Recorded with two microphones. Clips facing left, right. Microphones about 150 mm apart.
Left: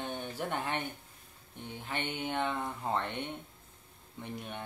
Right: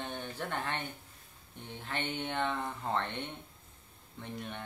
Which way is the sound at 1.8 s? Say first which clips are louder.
Even; 5° left (ahead or behind).